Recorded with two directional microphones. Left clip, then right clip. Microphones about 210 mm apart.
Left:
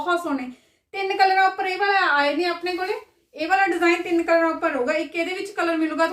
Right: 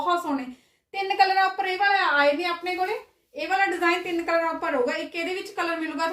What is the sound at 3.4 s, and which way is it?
A woman's voice, 20° left (ahead or behind).